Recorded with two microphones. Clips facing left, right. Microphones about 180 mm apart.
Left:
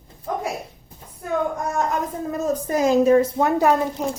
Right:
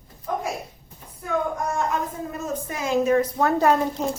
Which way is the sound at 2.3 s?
40° left (ahead or behind).